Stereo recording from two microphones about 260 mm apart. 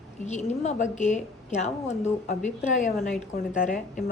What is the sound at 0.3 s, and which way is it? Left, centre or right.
A woman's voice, left.